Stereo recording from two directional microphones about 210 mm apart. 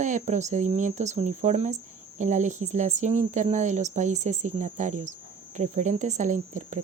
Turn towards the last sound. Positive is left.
turn(degrees=-35)  # may be behind; listen again after turning